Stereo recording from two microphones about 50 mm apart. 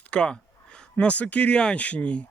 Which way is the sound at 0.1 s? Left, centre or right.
Left.